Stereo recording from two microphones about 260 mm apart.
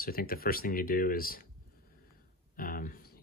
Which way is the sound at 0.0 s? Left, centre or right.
Left.